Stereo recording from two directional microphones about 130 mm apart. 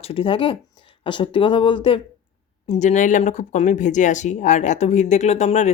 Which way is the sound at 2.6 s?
60° left (ahead or behind).